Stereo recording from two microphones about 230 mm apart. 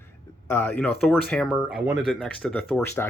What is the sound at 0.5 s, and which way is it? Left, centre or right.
Speech, centre.